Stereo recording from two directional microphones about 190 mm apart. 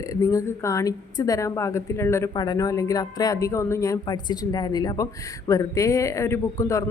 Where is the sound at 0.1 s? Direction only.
20° left (ahead or behind).